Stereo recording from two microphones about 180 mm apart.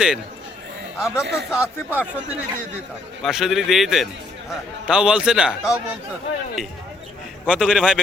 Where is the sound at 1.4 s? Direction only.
15° left (ahead or behind).